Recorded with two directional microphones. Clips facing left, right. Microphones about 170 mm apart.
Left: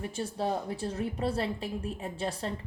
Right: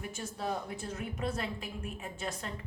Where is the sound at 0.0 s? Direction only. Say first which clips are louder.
Left 6 dB; 30° left (ahead or behind).